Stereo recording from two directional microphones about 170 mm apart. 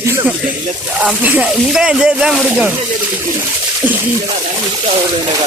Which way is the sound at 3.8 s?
10° right (ahead or behind).